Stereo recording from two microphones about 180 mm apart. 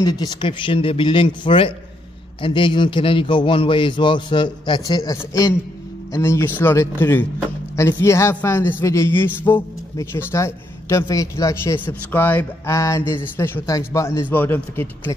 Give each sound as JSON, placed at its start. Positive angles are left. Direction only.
{"t": 0.0, "sound": "a man's voice", "side_deg": 20}